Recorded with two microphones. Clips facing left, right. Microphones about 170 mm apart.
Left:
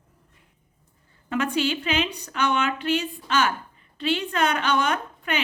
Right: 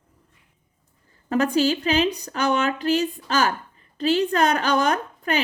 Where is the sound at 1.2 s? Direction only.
40° right (ahead or behind).